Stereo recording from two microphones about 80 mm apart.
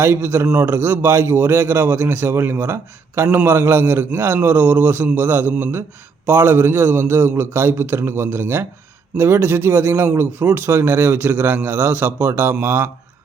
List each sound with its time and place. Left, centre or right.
0.0 s a man's voice: right